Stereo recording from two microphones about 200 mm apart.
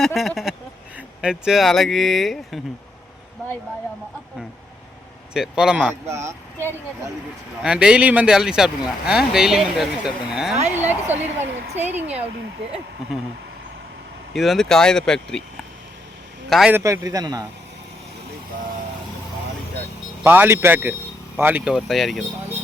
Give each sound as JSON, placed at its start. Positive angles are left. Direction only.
{"t": 0.0, "sound": "speech", "side_deg": 0}
{"t": 5.3, "sound": "speech", "side_deg": -5}
{"t": 7.6, "sound": "a man's voice", "side_deg": -5}
{"t": 11.9, "sound": "speech", "side_deg": -35}
{"t": 14.3, "sound": "speech", "side_deg": 0}
{"t": 16.5, "sound": "speech", "side_deg": -5}
{"t": 16.8, "sound": "a man's voice", "side_deg": -15}
{"t": 20.2, "sound": "a man's voice", "side_deg": -10}